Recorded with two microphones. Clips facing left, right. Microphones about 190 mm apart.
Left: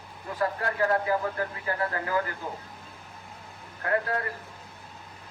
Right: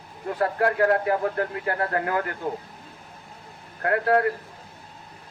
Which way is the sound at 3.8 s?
65° right (ahead or behind).